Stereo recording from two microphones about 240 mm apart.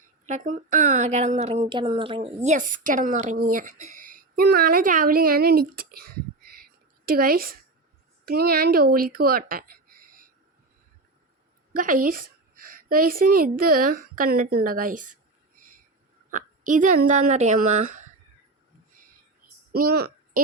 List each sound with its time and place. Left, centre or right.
0.3 s a woman's voice: right
11.7 s a woman's voice: right
16.3 s a woman's voice: right
19.7 s a child's voice: right